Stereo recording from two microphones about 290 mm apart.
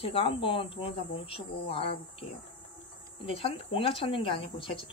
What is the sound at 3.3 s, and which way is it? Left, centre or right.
Speech, centre.